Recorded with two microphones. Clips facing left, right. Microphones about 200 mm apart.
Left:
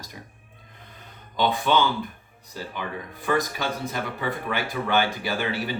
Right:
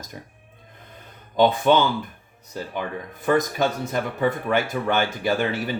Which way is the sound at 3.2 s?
50° right (ahead or behind).